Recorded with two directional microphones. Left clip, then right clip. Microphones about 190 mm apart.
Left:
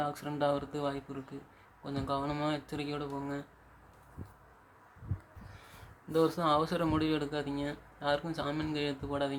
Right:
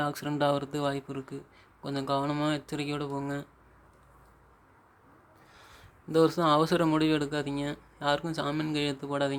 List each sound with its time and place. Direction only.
0.0 s speech: 30° right (ahead or behind)
6.1 s speech: 25° right (ahead or behind)